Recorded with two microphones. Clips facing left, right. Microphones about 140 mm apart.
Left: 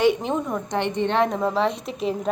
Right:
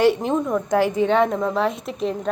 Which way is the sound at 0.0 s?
Centre (ahead or behind).